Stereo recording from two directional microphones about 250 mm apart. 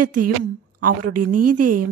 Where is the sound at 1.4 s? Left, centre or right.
Right.